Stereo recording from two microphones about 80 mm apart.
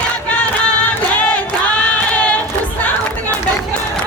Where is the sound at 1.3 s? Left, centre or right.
Centre.